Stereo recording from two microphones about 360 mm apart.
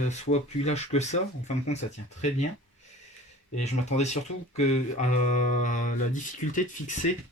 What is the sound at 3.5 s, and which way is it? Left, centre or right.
Speech, centre.